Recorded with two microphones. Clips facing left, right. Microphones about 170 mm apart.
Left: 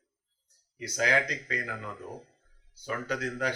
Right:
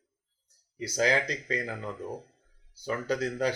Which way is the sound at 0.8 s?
30° right (ahead or behind).